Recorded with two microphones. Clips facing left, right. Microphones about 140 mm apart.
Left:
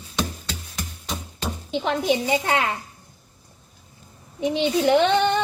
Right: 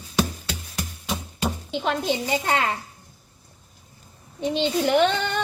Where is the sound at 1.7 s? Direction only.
15° left (ahead or behind).